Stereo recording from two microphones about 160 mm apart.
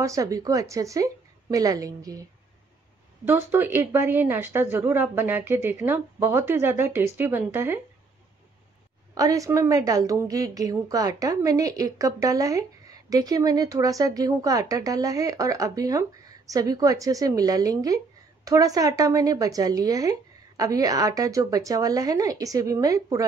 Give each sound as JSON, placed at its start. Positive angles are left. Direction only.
{"t": 0.0, "sound": "a woman's voice", "side_deg": -20}
{"t": 3.3, "sound": "speech", "side_deg": -15}
{"t": 9.1, "sound": "a woman's voice", "side_deg": -20}